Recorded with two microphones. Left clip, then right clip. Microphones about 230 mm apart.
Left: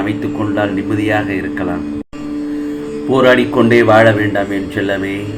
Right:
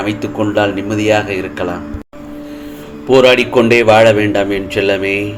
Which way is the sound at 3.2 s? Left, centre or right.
Right.